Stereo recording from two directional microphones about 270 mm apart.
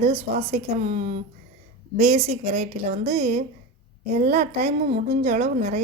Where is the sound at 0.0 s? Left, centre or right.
Right.